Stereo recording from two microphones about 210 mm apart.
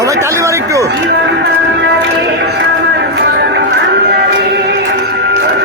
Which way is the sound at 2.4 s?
50° right (ahead or behind).